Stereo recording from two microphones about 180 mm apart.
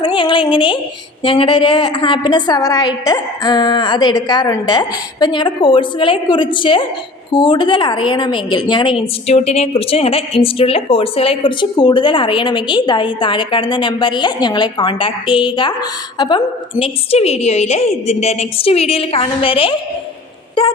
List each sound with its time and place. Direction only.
0.0 s speech: 25° left (ahead or behind)
9.2 s speech: 35° left (ahead or behind)
16.8 s a woman's voice: 35° left (ahead or behind)